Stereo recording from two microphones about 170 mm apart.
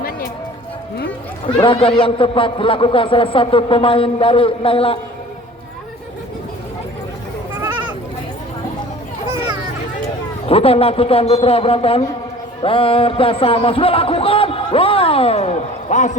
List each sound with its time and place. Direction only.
1.5 s a man's voice: 30° left (ahead or behind)
10.4 s a man's voice: 35° left (ahead or behind)